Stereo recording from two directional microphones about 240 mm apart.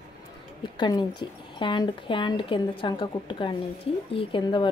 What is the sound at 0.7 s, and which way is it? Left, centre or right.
Speech, centre.